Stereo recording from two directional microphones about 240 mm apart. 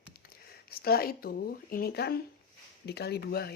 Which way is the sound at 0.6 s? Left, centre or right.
Left.